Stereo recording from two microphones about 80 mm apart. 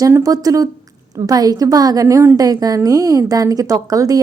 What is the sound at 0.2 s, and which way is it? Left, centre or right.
Speech, right.